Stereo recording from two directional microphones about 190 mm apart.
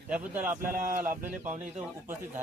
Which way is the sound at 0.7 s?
45° right (ahead or behind).